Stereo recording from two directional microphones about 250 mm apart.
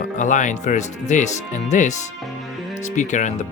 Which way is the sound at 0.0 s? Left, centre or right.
Left.